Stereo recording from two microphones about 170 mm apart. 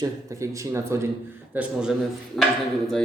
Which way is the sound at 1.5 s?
5° right (ahead or behind).